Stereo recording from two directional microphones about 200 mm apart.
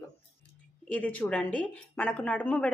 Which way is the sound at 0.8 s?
5° left (ahead or behind).